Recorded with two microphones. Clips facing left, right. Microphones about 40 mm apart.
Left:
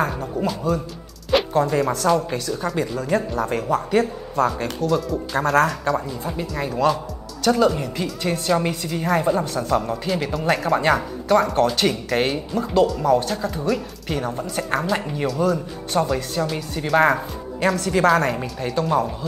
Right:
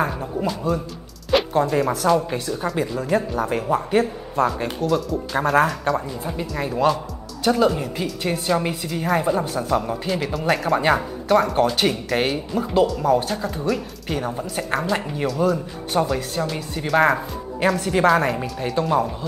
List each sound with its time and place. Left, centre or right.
0.4 s a woman's voice: centre
4.8 s a woman's voice: centre
17.7 s a woman's voice: centre
18.0 s a woman's voice: centre